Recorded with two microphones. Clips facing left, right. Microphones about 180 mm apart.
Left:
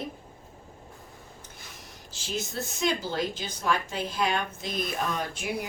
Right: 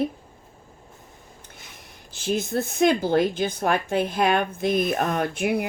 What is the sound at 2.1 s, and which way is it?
A woman's voice, 55° right (ahead or behind).